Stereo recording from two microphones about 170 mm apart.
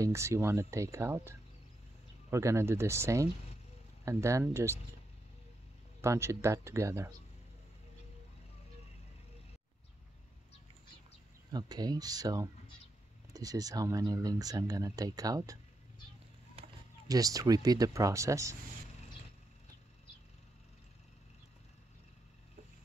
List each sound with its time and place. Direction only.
0.0 s speech: 15° right (ahead or behind)
2.3 s speech: 15° right (ahead or behind)
5.9 s speech: 15° right (ahead or behind)
11.5 s speech: 25° right (ahead or behind)
17.1 s speech: 20° right (ahead or behind)